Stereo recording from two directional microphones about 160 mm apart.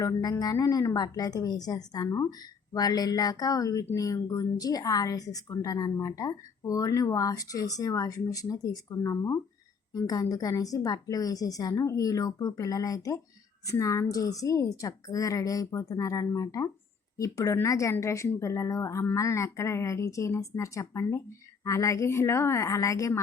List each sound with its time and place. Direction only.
0.0 s speech: 25° left (ahead or behind)